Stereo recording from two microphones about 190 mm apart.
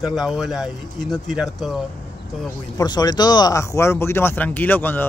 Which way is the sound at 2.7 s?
20° left (ahead or behind).